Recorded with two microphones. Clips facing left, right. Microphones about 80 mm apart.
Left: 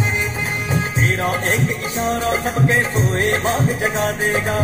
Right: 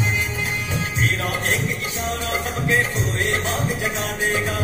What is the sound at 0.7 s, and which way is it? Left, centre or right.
Music, left.